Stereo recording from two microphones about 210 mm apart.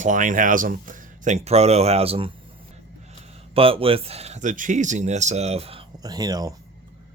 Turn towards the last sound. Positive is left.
turn(degrees=-15)  # may be behind; listen again after turning